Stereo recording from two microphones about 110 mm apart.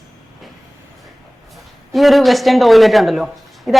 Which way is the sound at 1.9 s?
Centre (ahead or behind).